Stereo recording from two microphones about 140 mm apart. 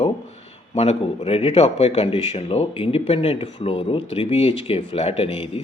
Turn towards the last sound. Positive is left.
turn(degrees=45)  # may be behind; listen again after turning